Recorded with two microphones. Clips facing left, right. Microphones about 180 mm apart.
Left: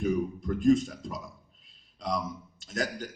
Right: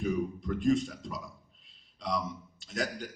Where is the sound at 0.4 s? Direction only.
45° left (ahead or behind).